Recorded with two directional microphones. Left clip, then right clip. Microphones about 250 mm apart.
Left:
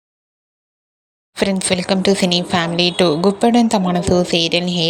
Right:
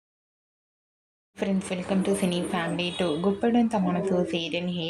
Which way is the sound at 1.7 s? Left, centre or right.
Left.